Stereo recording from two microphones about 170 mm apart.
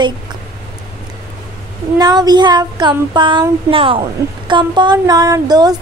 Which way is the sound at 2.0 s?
25° right (ahead or behind).